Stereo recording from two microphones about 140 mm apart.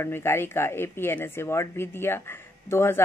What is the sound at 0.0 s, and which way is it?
Speech, 20° left (ahead or behind).